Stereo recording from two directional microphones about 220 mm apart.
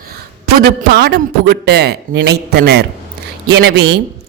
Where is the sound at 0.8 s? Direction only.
45° right (ahead or behind).